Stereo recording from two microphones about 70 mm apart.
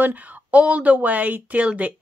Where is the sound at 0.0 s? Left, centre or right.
Right.